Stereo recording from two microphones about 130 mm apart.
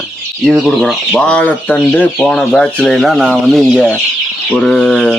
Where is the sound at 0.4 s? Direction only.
Centre (ahead or behind).